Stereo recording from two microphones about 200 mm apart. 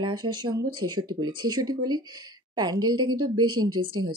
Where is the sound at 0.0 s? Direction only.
20° right (ahead or behind).